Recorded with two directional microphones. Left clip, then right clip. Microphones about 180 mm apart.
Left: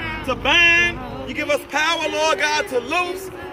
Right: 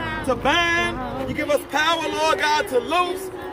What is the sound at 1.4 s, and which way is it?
A man's voice, 25° right (ahead or behind).